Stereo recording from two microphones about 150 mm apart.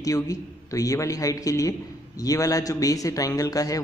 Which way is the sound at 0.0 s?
20° left (ahead or behind).